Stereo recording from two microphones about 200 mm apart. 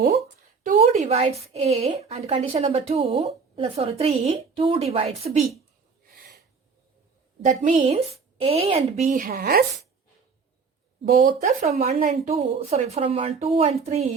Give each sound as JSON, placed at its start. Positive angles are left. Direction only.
{"t": 0.6, "sound": "a woman's voice", "side_deg": -35}
{"t": 7.4, "sound": "a woman's voice", "side_deg": -40}
{"t": 11.2, "sound": "a woman's voice", "side_deg": -40}
{"t": 11.9, "sound": "a woman's voice", "side_deg": -45}